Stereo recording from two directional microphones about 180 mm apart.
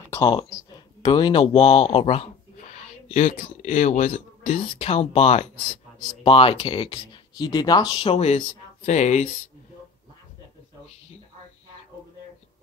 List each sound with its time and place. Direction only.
0.2 s speech: 30° left (ahead or behind)